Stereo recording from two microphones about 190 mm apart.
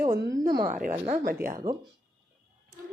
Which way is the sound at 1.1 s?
50° right (ahead or behind).